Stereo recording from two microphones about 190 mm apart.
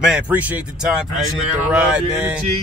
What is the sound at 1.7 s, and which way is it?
Speech, 5° right (ahead or behind).